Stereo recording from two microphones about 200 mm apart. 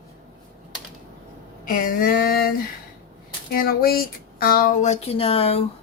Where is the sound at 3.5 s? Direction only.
45° left (ahead or behind); by 5.6 s 30° left (ahead or behind).